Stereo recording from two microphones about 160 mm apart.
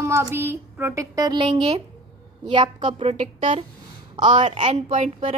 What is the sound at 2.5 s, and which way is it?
Speech, 30° right (ahead or behind).